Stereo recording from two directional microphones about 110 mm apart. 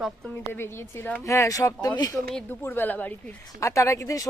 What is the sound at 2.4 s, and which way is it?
Speech, 20° left (ahead or behind).